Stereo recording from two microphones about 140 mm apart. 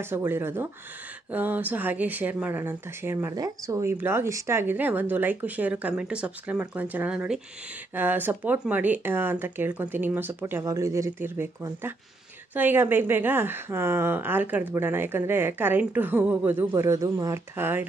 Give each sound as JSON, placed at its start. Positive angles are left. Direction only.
{"t": 0.0, "sound": "a woman's voice", "side_deg": -15}